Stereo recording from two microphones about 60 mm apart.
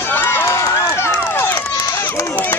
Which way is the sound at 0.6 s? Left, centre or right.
Left.